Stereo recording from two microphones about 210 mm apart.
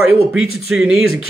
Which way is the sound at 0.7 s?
Centre (ahead or behind).